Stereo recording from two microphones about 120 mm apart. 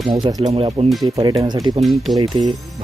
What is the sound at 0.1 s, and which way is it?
Speech, 35° right (ahead or behind).